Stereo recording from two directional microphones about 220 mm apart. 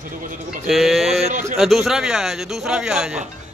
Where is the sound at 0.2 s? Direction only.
35° right (ahead or behind).